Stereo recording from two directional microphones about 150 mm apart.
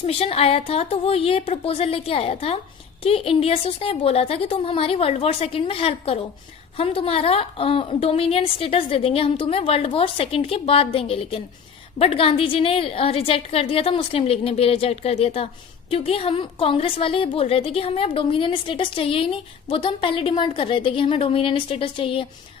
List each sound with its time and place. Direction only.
0.0 s a woman's voice: 40° left (ahead or behind)